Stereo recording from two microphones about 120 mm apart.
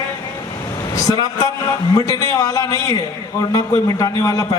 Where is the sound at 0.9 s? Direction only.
30° left (ahead or behind).